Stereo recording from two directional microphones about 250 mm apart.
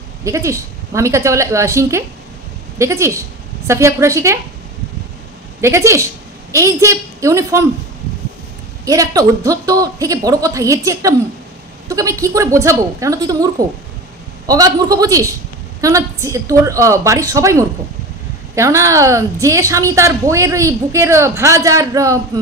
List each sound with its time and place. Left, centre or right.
0.2 s a woman's voice: centre
5.6 s a woman's voice: centre
8.8 s a woman's voice: centre